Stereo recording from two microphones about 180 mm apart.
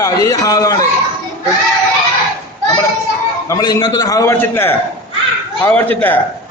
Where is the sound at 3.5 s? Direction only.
20° left (ahead or behind).